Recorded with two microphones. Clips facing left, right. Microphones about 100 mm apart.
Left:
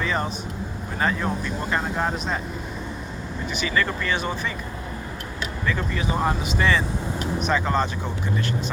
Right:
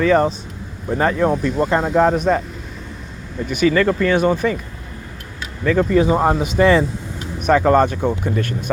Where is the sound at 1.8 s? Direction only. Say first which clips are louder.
Right 11 dB; 90° right.